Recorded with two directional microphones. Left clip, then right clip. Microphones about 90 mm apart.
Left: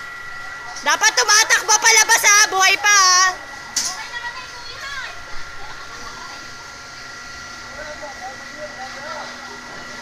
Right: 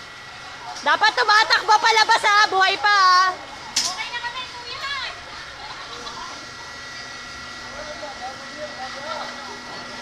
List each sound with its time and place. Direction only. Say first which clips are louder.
0.8 s speech: left 1 dB; 20° left (ahead or behind)